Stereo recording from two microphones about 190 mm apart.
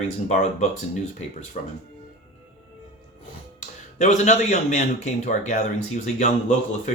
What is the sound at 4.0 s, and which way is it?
Speech, 40° left (ahead or behind).